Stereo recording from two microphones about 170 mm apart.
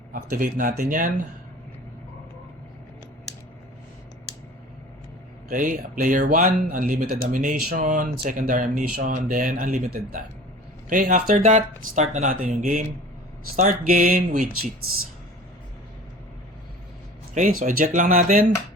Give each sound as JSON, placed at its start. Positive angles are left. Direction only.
{"t": 0.1, "sound": "speech", "side_deg": -55}
{"t": 5.5, "sound": "speech", "side_deg": -50}
{"t": 17.3, "sound": "speech", "side_deg": -50}